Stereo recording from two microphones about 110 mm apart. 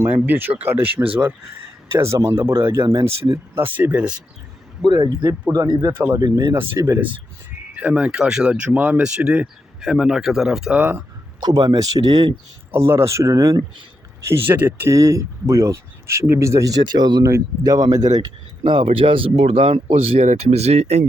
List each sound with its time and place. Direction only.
0.0 s speech: 20° right (ahead or behind)
4.9 s speech: 35° right (ahead or behind)
5.9 s speech: 20° right (ahead or behind)
6.1 s speech: 35° right (ahead or behind)
7.8 s speech: 10° right (ahead or behind)
11.3 s speech: 40° right (ahead or behind)
12.7 s speech: 25° right (ahead or behind)
14.3 s speech: 20° right (ahead or behind)
14.8 s speech: 30° right (ahead or behind)
17.2 s speech: 30° right (ahead or behind)
18.6 s a man's voice: 50° right (ahead or behind); by 21.1 s 80° right